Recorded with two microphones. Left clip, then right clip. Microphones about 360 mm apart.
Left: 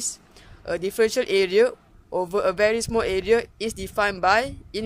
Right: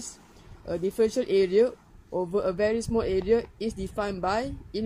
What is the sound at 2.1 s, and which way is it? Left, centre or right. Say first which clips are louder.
Speech: left 3 dB; left.